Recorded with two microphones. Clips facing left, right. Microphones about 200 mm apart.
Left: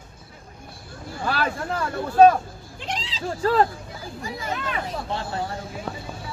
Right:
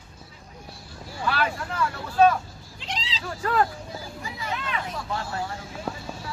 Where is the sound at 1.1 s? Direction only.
50° left (ahead or behind).